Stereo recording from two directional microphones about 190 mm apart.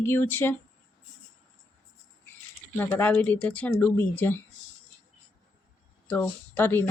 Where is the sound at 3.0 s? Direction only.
10° left (ahead or behind).